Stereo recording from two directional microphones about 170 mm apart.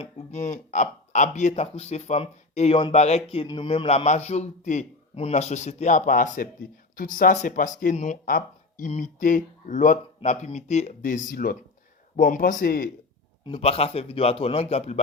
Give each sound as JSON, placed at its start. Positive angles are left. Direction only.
{"t": 0.0, "sound": "speech", "side_deg": 40}
{"t": 3.4, "sound": "speech", "side_deg": 30}
{"t": 13.4, "sound": "speech", "side_deg": 35}